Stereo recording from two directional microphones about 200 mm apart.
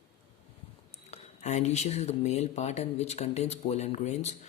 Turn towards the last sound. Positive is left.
turn(degrees=35)  # may be behind; listen again after turning